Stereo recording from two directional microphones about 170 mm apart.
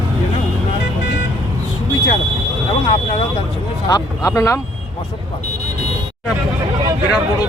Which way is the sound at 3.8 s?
20° left (ahead or behind).